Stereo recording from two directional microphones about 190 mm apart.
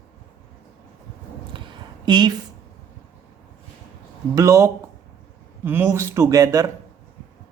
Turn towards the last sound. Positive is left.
turn(degrees=-20)  # may be behind; listen again after turning